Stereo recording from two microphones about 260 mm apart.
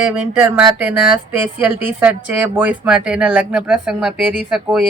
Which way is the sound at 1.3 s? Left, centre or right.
Centre.